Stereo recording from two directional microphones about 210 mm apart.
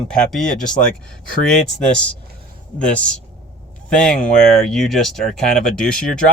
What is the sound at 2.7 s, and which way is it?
Speech, 5° left (ahead or behind).